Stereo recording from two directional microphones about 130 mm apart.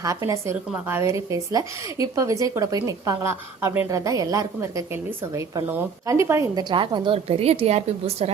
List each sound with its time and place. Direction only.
0.0 s a woman's voice: 25° right (ahead or behind)
6.6 s a woman's voice: 35° right (ahead or behind); by 8.3 s 55° right (ahead or behind)